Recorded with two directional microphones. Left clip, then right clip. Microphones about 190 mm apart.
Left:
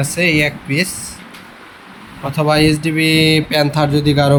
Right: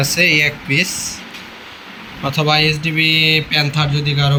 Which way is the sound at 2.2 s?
20° left (ahead or behind).